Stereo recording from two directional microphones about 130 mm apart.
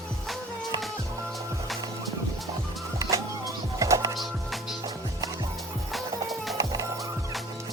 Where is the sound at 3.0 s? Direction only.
25° right (ahead or behind).